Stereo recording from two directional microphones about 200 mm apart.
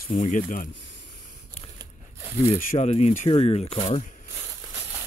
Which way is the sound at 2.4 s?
30° left (ahead or behind).